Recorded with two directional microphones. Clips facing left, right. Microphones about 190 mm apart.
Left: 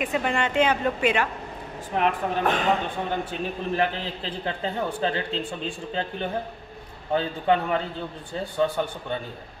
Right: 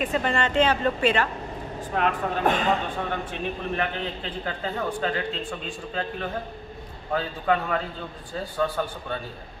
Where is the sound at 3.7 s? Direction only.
30° left (ahead or behind).